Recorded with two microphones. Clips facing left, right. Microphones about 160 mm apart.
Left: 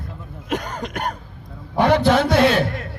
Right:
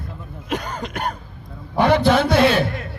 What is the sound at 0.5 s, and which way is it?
Throat clearing, 45° left (ahead or behind).